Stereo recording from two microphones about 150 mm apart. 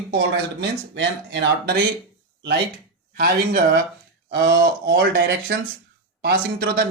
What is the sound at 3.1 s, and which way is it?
A man's voice, 85° right.